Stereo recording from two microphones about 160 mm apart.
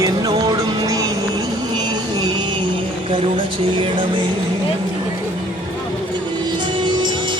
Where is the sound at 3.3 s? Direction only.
30° right (ahead or behind).